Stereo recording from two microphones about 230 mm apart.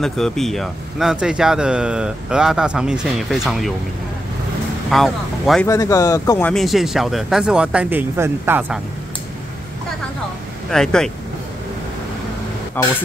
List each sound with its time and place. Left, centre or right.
0.0 s speech: centre
4.9 s speech: centre
5.7 s speech: centre
10.7 s speech: centre
12.8 s a man's voice: centre